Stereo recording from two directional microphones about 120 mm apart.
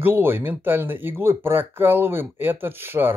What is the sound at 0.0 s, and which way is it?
Speech, 15° right (ahead or behind).